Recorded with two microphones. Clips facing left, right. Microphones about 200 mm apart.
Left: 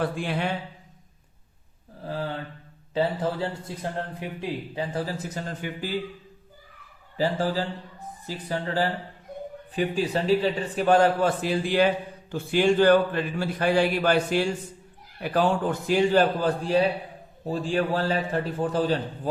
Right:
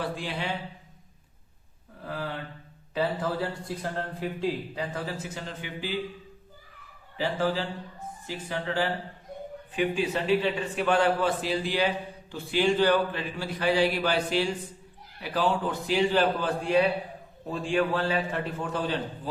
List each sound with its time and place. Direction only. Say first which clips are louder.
0.0 s a man's voice: left 5 dB; 55° left (ahead or behind)
2.0 s a sound: left 3 dB; 30° left (ahead or behind)
2.9 s a man's voice: left 3 dB; 25° left (ahead or behind)
4.8 s a man's voice: left 3 dB; 35° left (ahead or behind)
7.2 s a man's voice: left 2 dB; 40° left (ahead or behind)